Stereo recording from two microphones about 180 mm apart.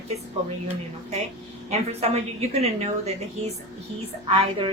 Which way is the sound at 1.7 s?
35° right (ahead or behind).